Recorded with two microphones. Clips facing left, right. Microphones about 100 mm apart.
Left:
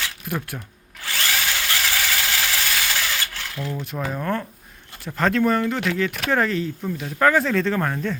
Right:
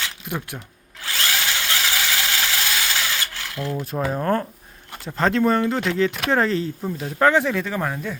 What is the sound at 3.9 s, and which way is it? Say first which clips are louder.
Speech: right 4 dB; 25° right (ahead or behind).